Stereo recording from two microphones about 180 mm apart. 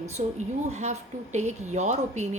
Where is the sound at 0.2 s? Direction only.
40° right (ahead or behind).